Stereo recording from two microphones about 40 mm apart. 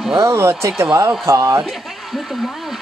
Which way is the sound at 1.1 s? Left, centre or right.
Centre.